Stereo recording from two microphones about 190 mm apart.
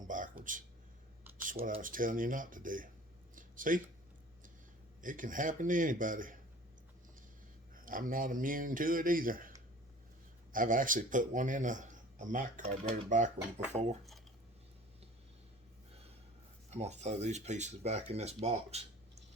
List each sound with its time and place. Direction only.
0.1 s a sound: 45° right (ahead or behind)
1.6 s a man's voice: 45° right (ahead or behind)
3.3 s a sound: 45° right (ahead or behind)
4.9 s a man's voice: 45° right (ahead or behind)
7.9 s a man's voice: 45° right (ahead or behind)
10.5 s a man's voice: 45° right (ahead or behind)
16.6 s speech: 35° right (ahead or behind)